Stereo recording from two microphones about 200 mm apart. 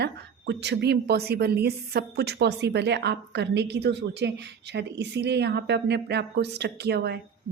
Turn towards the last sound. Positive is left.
turn(degrees=-55)  # may be behind; listen again after turning